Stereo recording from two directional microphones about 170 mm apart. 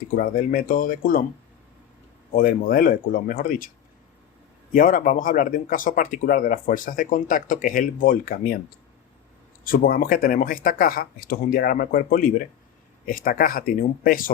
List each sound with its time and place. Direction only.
0.2 s speech: 55° left (ahead or behind)
2.3 s speech: 55° left (ahead or behind)
4.7 s speech: 55° left (ahead or behind)
9.6 s speech: 60° left (ahead or behind)